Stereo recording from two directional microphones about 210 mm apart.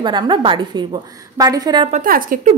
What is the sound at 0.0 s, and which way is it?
A woman's voice, 20° right (ahead or behind).